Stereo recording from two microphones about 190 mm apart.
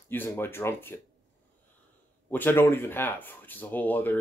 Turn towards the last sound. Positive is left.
turn(degrees=10)  # may be behind; listen again after turning